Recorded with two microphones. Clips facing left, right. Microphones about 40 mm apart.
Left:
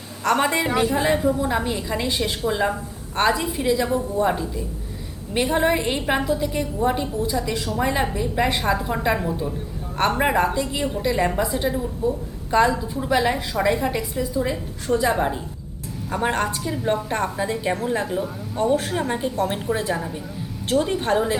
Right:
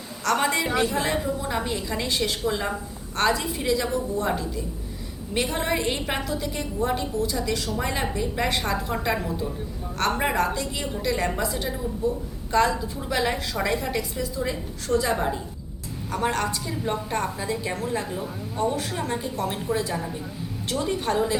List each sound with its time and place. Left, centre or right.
0.3 s a woman's voice: centre